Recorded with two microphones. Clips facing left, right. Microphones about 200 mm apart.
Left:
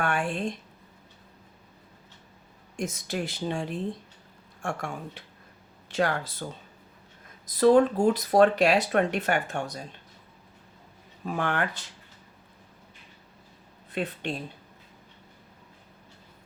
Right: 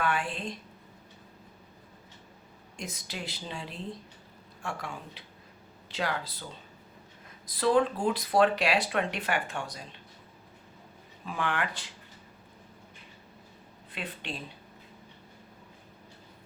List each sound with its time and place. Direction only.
0.0 s speech: 45° left (ahead or behind)
2.7 s speech: 45° left (ahead or behind)
7.5 s speech: 45° left (ahead or behind)
11.3 s speech: 45° left (ahead or behind)
13.9 s speech: 45° left (ahead or behind)